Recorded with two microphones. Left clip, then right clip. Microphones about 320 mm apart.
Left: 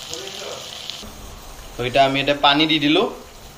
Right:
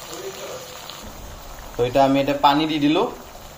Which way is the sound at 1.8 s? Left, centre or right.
Right.